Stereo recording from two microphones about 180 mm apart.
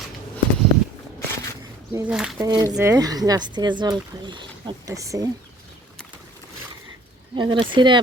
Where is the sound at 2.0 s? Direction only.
5° right (ahead or behind).